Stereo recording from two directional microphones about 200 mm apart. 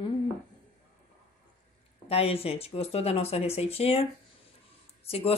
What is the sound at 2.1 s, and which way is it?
Speech, 30° left (ahead or behind).